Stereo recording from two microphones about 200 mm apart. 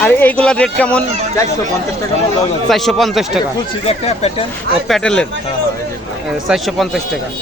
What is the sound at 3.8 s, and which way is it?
Speech, 30° left (ahead or behind).